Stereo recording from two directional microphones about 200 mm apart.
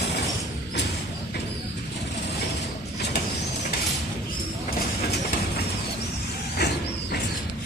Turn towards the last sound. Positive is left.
turn(degrees=55)  # may be behind; listen again after turning